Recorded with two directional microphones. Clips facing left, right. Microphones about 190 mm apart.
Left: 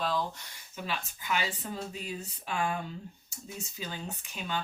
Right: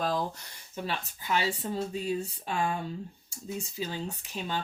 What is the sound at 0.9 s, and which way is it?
Speech, 30° right (ahead or behind).